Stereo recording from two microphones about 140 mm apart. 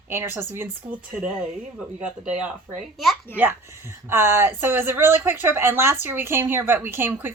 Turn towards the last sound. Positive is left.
turn(degrees=-15)  # may be behind; listen again after turning